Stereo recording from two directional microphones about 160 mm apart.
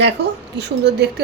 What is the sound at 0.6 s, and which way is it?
Speech, 90° right.